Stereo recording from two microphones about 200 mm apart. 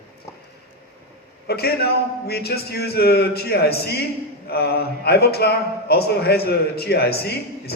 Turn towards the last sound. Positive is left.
turn(degrees=55)  # may be behind; listen again after turning